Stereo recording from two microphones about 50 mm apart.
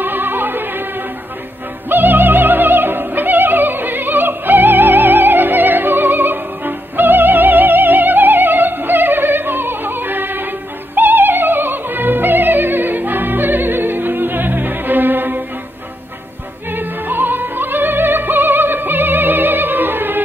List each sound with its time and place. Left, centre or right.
0.0 s music: right
1.9 s opera: right
11.0 s music: right
16.7 s music: right